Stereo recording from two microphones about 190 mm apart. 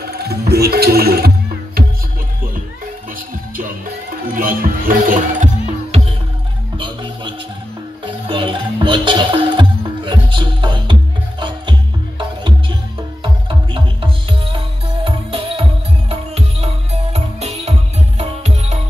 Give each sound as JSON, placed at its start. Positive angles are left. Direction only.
{"t": 0.0, "sound": "music", "side_deg": -55}
{"t": 4.4, "sound": "speech", "side_deg": -50}
{"t": 6.8, "sound": "music", "side_deg": -25}